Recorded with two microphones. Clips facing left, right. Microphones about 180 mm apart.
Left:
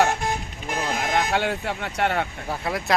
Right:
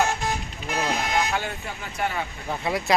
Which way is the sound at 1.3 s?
75° left (ahead or behind).